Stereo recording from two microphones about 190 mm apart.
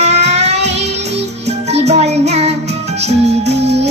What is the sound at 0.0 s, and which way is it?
Music, 35° right (ahead or behind).